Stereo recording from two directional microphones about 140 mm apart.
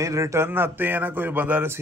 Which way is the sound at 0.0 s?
20° right (ahead or behind).